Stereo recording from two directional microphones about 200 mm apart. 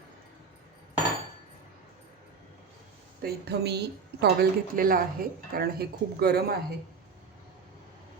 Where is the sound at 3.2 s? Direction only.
50° right (ahead or behind).